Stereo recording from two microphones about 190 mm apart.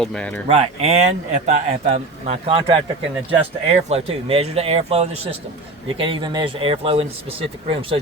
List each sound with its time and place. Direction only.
0.0 s speech: 5° left (ahead or behind)
0.4 s speech: 35° right (ahead or behind)